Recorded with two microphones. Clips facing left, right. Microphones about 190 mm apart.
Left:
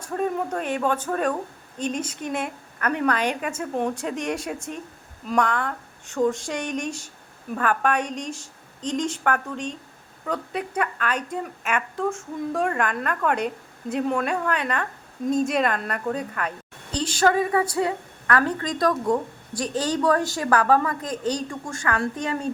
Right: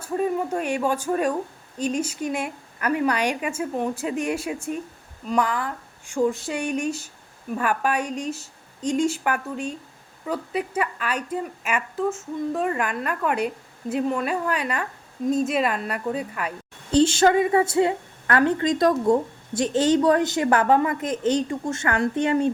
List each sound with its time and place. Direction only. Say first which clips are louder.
0.0 s a woman's voice: right 2 dB; 10° right (ahead or behind)
16.9 s a woman's voice: right 5 dB; 25° right (ahead or behind)